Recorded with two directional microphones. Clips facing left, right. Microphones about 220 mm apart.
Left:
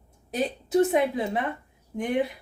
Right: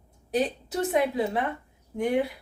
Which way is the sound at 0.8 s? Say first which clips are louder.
Left 2 dB; 20° left (ahead or behind).